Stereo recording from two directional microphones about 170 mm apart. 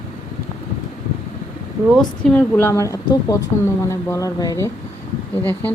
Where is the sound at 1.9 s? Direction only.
5° left (ahead or behind); by 4.7 s 20° left (ahead or behind).